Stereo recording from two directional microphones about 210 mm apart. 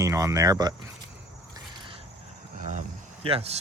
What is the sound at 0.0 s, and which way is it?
Speech, 15° right (ahead or behind).